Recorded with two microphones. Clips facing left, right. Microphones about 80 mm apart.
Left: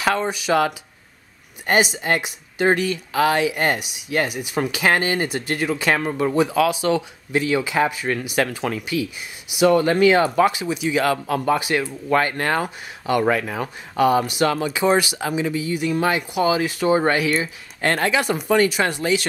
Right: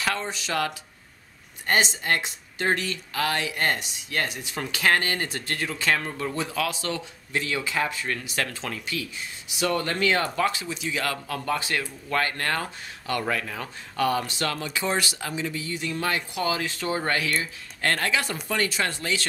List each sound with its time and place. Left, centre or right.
0.0 s speech: centre